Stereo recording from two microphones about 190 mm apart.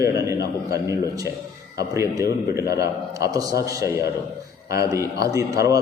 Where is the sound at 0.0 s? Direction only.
15° right (ahead or behind).